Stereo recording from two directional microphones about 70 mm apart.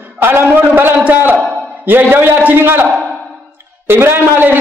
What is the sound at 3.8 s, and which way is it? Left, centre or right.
Speech, right.